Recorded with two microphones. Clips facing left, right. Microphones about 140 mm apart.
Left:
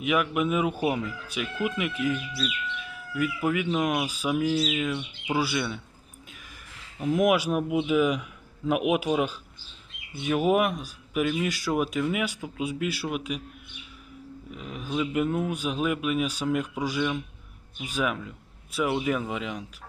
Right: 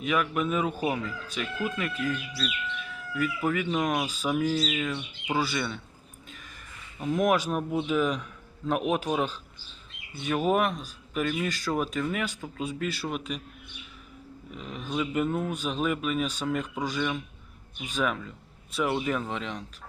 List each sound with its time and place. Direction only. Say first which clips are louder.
0.0 s speech: left 2 dB; 10° left (ahead or behind)
6.7 s a sound: even; 90° left
7.0 s speech: left 2 dB; 10° left (ahead or behind)
14.5 s speech: left 1 dB; 5° left (ahead or behind)